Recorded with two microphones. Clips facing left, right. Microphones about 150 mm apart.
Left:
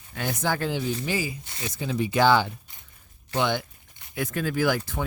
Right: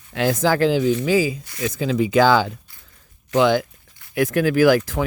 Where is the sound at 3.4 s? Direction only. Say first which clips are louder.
Right 9 dB; 90° right.